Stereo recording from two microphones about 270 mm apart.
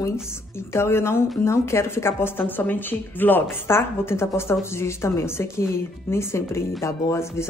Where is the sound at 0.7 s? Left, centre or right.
Centre.